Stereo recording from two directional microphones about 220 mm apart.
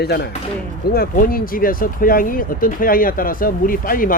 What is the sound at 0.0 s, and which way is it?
Speech, 45° left (ahead or behind).